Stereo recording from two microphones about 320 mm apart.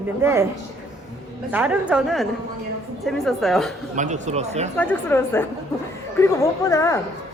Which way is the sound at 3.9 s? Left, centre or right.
Right.